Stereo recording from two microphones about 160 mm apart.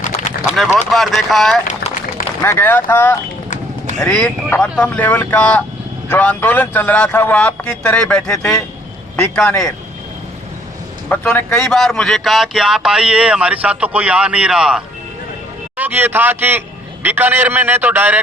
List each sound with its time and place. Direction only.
0.0 s run: 50° left (ahead or behind)
0.5 s a man's voice: centre (ahead or behind)
1.6 s run: 50° left (ahead or behind)
2.4 s a man's voice: 15° left (ahead or behind)
11.1 s a man's voice: 10° left (ahead or behind); by 18.2 s 10° right (ahead or behind)